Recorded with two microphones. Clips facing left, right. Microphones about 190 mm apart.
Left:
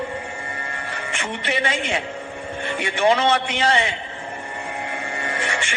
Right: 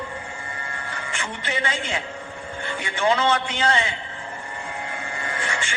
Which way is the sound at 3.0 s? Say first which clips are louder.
Left 3 dB; 20° left (ahead or behind).